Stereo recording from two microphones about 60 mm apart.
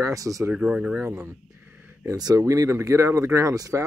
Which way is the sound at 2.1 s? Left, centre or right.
Right.